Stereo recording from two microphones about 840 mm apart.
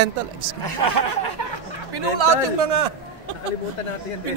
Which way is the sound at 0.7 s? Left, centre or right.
Right.